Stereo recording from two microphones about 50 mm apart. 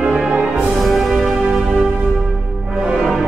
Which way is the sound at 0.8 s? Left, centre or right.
Centre.